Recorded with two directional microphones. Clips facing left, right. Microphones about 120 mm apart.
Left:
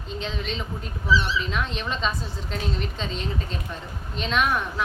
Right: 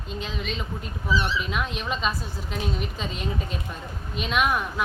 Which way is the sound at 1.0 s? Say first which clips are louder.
Left 2 dB; 55° right (ahead or behind).